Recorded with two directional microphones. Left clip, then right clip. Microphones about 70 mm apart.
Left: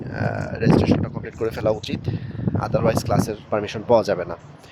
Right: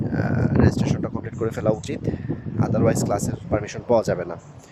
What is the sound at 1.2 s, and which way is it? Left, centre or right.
Speech, centre.